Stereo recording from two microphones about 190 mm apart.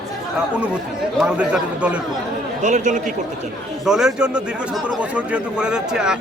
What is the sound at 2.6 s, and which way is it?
Speech, 40° right (ahead or behind).